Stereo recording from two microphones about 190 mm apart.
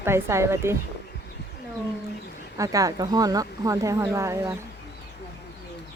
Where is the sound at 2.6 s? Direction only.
20° right (ahead or behind).